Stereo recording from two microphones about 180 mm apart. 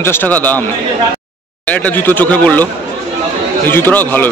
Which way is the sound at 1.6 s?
10° left (ahead or behind).